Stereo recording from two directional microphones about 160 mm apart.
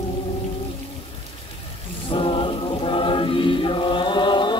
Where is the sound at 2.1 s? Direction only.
35° left (ahead or behind).